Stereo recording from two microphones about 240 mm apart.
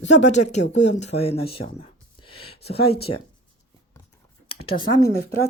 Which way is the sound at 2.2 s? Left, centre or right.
Left.